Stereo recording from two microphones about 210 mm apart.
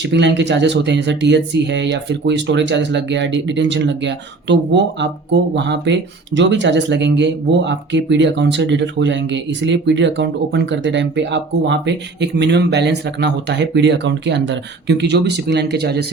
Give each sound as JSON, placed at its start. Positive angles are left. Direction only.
{"t": 0.0, "sound": "speech", "side_deg": -55}